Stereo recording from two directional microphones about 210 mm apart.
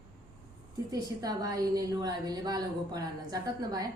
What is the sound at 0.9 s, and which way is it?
A woman's voice, 20° right (ahead or behind).